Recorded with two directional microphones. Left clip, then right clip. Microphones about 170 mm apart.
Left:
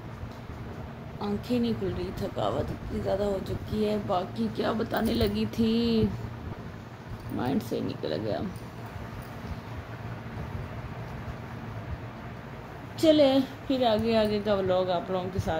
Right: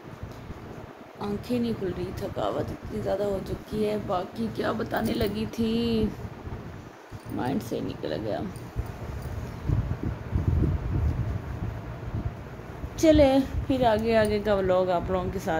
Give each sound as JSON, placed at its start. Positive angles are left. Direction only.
{"t": 1.2, "sound": "speech", "side_deg": 10}
{"t": 7.3, "sound": "speech", "side_deg": 15}
{"t": 13.0, "sound": "a woman's voice", "side_deg": 10}